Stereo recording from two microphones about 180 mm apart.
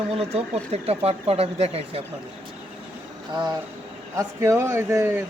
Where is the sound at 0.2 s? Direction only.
35° right (ahead or behind).